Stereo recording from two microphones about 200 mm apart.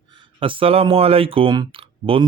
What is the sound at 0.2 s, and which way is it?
Speech, 25° right (ahead or behind).